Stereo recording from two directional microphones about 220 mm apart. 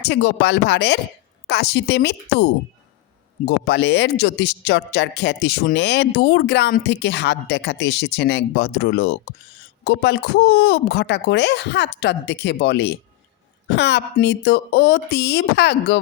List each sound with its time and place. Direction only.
0.0 s speech: 50° left (ahead or behind)